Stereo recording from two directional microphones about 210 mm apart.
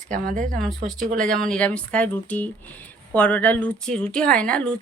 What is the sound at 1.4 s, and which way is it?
A woman's voice, 5° left (ahead or behind).